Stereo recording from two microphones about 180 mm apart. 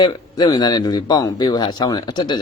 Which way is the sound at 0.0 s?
25° left (ahead or behind).